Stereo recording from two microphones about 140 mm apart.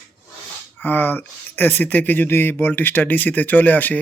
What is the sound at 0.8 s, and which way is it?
Speech, 15° left (ahead or behind).